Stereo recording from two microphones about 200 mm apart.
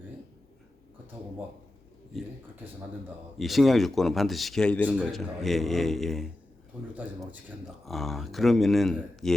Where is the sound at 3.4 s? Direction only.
Centre (ahead or behind).